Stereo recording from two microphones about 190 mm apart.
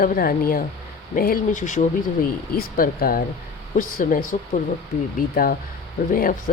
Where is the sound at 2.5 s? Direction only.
50° left (ahead or behind).